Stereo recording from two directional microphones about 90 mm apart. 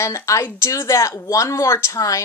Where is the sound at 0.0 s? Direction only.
35° left (ahead or behind).